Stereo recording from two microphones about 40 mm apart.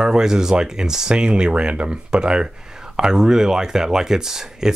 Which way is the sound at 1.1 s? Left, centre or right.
Right.